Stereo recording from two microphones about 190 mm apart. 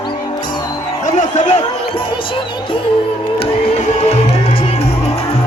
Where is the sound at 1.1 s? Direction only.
40° left (ahead or behind).